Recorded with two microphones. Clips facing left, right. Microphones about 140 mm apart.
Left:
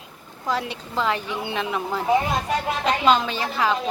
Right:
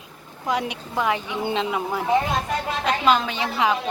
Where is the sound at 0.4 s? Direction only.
15° right (ahead or behind).